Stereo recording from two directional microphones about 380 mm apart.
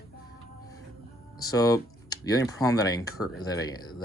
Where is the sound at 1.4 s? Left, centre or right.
Centre.